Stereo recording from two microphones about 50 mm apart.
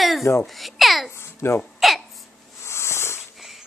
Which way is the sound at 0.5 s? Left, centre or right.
Centre.